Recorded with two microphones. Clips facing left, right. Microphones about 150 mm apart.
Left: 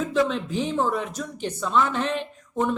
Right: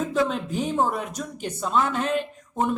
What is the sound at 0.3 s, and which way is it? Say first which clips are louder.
Speech: even; 45° right (ahead or behind).